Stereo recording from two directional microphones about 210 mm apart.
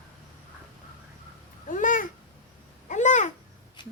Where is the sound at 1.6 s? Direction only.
40° left (ahead or behind).